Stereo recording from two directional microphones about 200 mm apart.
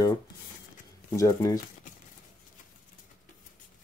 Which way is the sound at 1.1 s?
15° left (ahead or behind).